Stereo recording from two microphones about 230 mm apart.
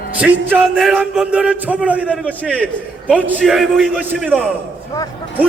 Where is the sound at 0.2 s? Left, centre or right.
Centre.